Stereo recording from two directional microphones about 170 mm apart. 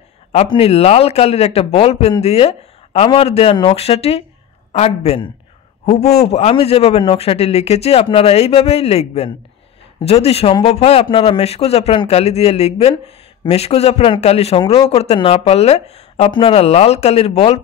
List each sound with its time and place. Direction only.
0.3 s speech: 35° left (ahead or behind)
6.3 s speech: 35° left (ahead or behind)